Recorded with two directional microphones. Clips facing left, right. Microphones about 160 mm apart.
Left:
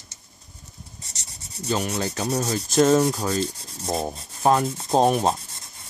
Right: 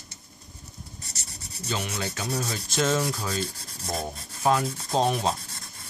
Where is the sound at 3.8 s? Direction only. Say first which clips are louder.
Left 5 dB; 30° left (ahead or behind).